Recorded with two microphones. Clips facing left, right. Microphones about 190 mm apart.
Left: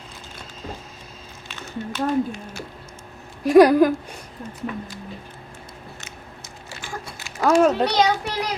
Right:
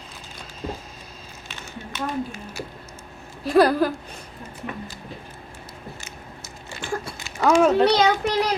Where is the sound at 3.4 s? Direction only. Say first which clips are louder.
Left 5 dB; 15° left (ahead or behind).